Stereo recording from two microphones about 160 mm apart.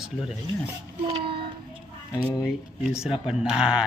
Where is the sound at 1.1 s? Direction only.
35° right (ahead or behind).